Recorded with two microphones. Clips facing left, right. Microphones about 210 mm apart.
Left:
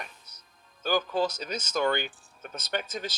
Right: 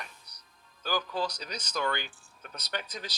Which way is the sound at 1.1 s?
25° left (ahead or behind).